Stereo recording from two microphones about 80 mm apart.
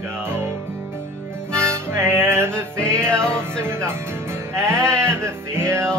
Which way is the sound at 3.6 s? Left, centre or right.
Right.